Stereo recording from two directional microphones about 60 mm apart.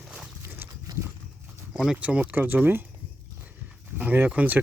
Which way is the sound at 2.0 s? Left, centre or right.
Right.